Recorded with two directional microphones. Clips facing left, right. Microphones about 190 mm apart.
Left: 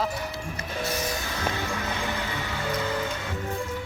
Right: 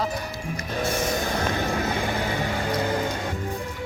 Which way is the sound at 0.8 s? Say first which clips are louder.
Right 4 dB; 50° right (ahead or behind).